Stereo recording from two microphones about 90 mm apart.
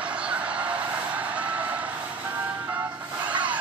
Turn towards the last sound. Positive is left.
turn(degrees=-15)  # may be behind; listen again after turning